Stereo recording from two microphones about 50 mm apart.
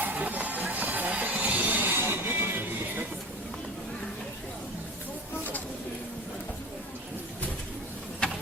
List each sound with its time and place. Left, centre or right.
0.0 s music: right